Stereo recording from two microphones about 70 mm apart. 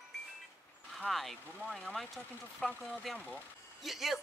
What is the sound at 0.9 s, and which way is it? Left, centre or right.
A woman's voice, centre.